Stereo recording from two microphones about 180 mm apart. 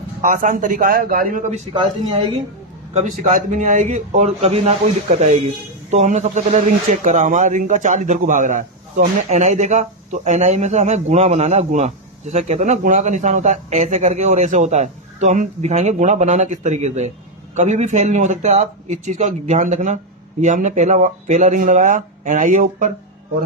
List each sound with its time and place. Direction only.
0.2 s a man's voice: 45° right (ahead or behind)
2.9 s a man's voice: 45° right (ahead or behind)